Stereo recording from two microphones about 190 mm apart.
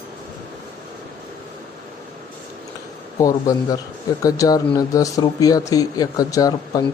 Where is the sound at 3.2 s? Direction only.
20° left (ahead or behind).